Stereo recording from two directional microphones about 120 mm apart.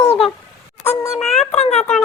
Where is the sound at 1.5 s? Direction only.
65° left (ahead or behind).